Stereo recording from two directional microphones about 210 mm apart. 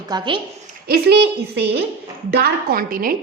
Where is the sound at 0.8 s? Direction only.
50° right (ahead or behind).